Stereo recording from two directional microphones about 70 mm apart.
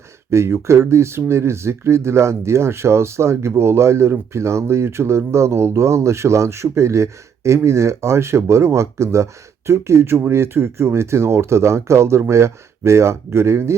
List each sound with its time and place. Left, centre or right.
0.3 s speech: right